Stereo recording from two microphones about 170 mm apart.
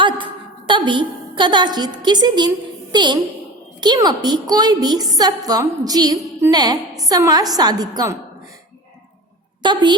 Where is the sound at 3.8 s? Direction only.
25° right (ahead or behind).